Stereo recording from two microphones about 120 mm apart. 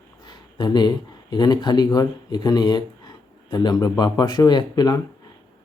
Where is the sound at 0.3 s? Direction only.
35° left (ahead or behind).